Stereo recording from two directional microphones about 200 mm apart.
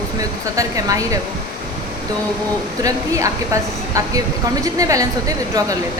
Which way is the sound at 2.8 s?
15° right (ahead or behind).